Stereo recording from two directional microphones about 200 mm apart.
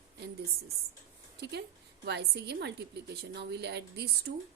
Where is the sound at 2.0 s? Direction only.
55° right (ahead or behind).